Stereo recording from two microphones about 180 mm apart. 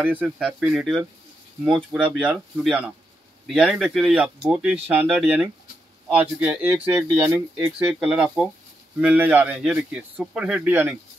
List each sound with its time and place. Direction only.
0.0 s speech: 10° right (ahead or behind)
7.9 s speech: 5° right (ahead or behind)